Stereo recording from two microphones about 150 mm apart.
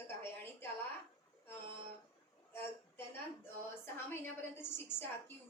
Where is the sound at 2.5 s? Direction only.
15° left (ahead or behind).